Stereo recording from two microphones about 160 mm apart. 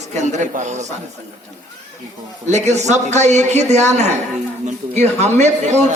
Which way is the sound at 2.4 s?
45° right (ahead or behind).